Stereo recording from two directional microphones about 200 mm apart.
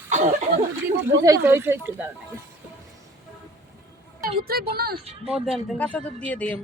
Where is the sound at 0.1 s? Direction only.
35° right (ahead or behind).